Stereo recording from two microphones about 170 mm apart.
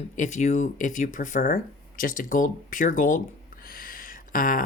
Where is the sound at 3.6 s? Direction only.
55° left (ahead or behind).